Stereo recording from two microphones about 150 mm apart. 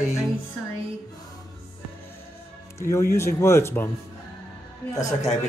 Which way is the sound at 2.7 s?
20° left (ahead or behind).